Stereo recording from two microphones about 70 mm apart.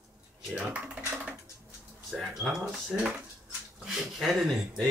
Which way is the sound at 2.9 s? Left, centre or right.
Centre.